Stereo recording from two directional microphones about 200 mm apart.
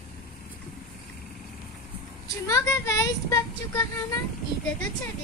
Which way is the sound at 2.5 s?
15° left (ahead or behind).